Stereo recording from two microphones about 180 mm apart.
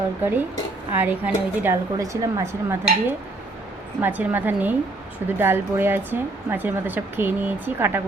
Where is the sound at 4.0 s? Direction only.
10° right (ahead or behind).